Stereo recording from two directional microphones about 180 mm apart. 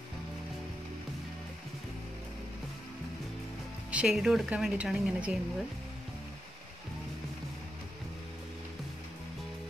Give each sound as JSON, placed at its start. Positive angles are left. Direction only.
{"t": 3.9, "sound": "speech", "side_deg": -5}